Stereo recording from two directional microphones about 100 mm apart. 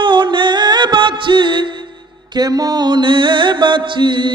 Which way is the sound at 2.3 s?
40° right (ahead or behind).